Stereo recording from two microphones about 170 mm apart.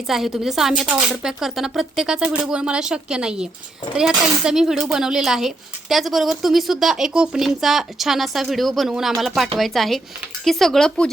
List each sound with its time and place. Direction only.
0.1 s a woman's voice: centre (ahead or behind)